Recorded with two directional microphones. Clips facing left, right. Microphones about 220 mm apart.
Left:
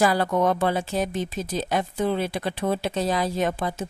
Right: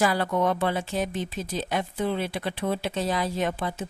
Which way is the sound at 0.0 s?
40° left (ahead or behind).